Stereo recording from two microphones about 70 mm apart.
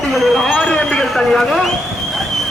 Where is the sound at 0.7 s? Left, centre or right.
Centre.